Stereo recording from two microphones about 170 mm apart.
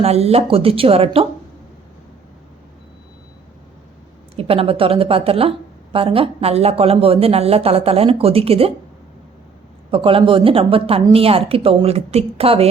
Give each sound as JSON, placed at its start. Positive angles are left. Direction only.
{"t": 0.0, "sound": "a woman's voice", "side_deg": -40}
{"t": 4.4, "sound": "a woman's voice", "side_deg": -35}
{"t": 9.9, "sound": "a woman's voice", "side_deg": -30}